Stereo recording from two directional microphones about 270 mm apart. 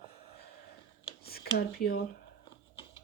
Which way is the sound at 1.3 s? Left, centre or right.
Left.